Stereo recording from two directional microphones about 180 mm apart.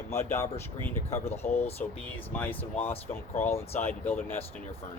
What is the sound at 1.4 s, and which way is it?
Speech, 35° left (ahead or behind).